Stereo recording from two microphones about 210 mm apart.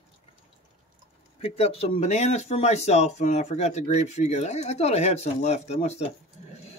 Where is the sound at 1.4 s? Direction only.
30° left (ahead or behind).